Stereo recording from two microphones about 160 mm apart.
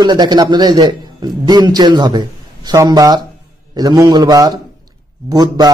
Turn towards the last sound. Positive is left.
turn(degrees=-25)  # may be behind; listen again after turning